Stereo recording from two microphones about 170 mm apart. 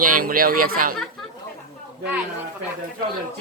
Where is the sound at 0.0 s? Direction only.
55° right (ahead or behind).